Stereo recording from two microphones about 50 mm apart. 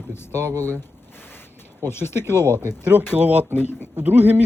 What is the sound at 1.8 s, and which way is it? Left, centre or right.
Speech, left.